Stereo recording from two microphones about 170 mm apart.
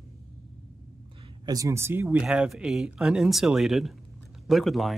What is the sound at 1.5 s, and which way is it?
Speech, 20° right (ahead or behind).